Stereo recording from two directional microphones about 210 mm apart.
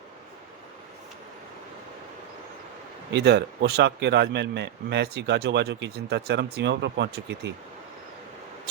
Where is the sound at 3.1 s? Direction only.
50° right (ahead or behind).